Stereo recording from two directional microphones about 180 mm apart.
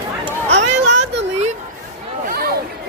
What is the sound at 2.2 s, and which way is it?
Chatter, 60° right (ahead or behind).